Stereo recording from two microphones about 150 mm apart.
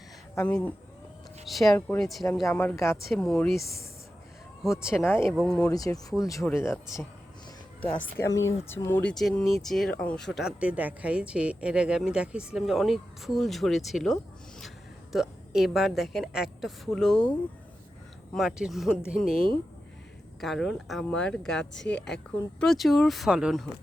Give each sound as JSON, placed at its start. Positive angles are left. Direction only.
{"t": 0.3, "sound": "speech", "side_deg": 10}
{"t": 2.5, "sound": "speech", "side_deg": 10}
{"t": 4.6, "sound": "speech", "side_deg": 0}
{"t": 5.0, "sound": "speech", "side_deg": 15}
{"t": 5.3, "sound": "speech", "side_deg": 0}
{"t": 5.7, "sound": "speech", "side_deg": 25}
{"t": 18.3, "sound": "speech", "side_deg": -5}
{"t": 20.4, "sound": "speech", "side_deg": 0}